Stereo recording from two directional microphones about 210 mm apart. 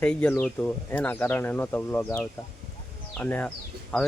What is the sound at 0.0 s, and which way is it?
Speech, 5° left (ahead or behind).